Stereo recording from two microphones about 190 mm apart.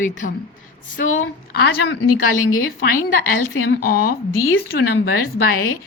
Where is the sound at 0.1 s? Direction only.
40° left (ahead or behind).